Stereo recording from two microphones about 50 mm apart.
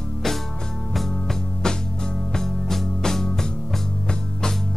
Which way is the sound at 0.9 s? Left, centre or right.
Centre.